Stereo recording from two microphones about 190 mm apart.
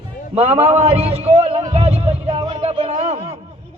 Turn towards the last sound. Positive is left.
turn(degrees=-35)  # may be behind; listen again after turning